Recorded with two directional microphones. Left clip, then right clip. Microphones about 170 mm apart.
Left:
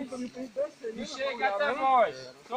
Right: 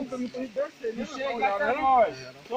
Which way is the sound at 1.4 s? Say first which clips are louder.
Right 3 dB; centre (ahead or behind).